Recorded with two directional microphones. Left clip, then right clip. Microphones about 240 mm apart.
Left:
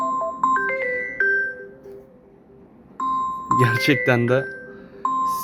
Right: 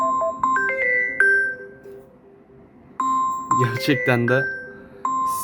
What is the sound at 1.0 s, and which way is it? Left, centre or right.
Music, right.